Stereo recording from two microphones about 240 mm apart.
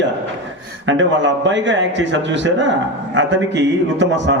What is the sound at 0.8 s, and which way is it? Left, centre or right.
A man's voice, right.